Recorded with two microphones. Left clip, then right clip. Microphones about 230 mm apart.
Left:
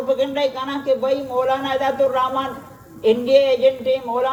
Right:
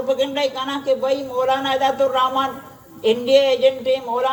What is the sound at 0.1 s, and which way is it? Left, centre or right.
A man's voice, right.